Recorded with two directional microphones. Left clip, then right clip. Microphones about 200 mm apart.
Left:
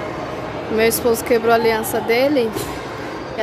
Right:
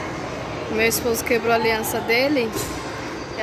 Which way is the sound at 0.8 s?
20° left (ahead or behind).